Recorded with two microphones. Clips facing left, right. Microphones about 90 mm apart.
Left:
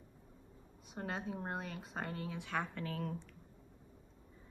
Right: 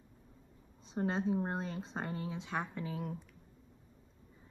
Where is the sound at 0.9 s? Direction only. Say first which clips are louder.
Right 8 dB; 25° right (ahead or behind).